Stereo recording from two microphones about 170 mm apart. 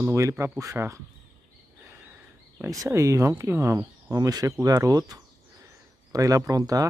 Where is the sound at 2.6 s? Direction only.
20° right (ahead or behind).